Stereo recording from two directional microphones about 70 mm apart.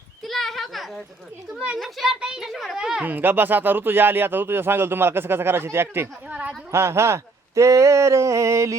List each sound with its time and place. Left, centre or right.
0.3 s a sound: centre
1.8 s a child's voice: centre
2.5 s a child's voice: centre
3.0 s speech: right
6.2 s a sound: centre
6.7 s speech: right